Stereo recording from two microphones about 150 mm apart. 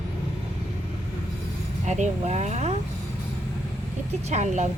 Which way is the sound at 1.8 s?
50° right (ahead or behind).